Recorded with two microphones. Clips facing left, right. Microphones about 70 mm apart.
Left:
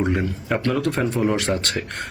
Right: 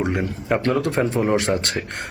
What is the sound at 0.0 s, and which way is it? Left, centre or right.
A man's voice, centre.